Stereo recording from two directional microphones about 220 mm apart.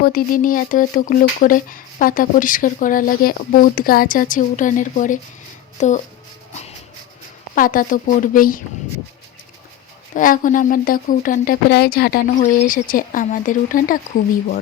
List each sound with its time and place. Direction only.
0.0 s speech: 40° left (ahead or behind)
7.5 s speech: 40° left (ahead or behind)
10.2 s speech: 35° left (ahead or behind)